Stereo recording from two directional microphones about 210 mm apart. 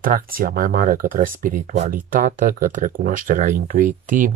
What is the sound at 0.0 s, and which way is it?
Speech, 40° right (ahead or behind).